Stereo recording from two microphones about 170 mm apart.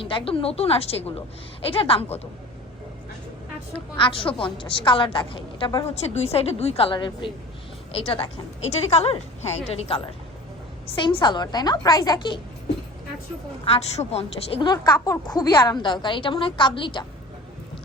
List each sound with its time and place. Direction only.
0.0 s a woman's voice: 30° left (ahead or behind)
3.9 s a woman's voice: 30° left (ahead or behind)
13.7 s a woman's voice: 40° left (ahead or behind)